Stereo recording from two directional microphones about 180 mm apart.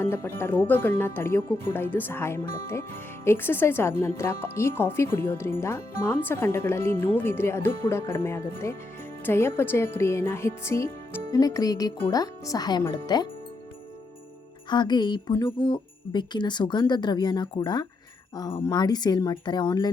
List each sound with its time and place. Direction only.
0.0 s speech: 10° left (ahead or behind)
14.7 s speech: 25° left (ahead or behind)